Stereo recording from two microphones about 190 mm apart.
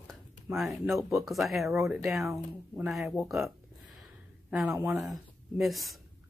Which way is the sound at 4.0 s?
Centre (ahead or behind).